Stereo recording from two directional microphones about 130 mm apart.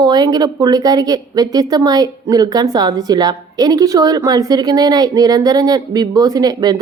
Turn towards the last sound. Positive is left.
turn(degrees=-30)  # may be behind; listen again after turning